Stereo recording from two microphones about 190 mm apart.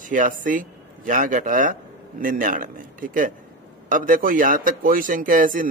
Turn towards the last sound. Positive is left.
turn(degrees=-45)  # may be behind; listen again after turning